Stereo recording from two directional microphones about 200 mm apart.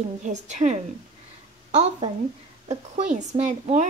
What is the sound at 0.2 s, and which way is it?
Speech, 35° right (ahead or behind).